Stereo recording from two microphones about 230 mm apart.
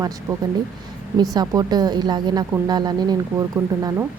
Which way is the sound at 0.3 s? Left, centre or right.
Centre.